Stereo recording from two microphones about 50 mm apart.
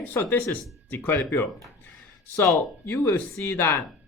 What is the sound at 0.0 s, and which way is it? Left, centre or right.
Speech, left.